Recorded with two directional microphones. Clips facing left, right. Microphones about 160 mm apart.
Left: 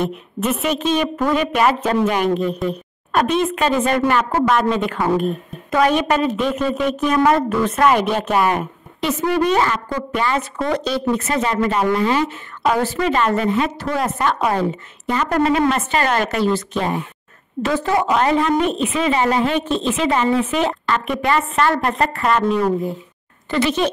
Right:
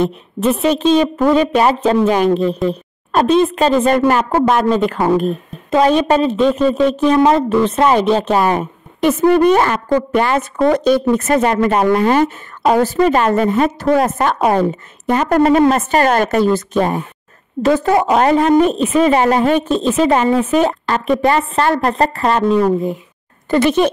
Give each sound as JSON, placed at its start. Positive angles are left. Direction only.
{"t": 0.0, "sound": "a woman's voice", "side_deg": -35}
{"t": 9.0, "sound": "a woman's voice", "side_deg": -50}
{"t": 23.5, "sound": "a woman's voice", "side_deg": -50}